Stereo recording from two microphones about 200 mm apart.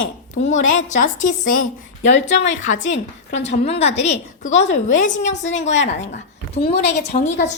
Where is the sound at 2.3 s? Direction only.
70° left (ahead or behind).